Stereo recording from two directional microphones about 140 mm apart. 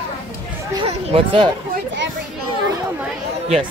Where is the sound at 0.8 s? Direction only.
40° right (ahead or behind).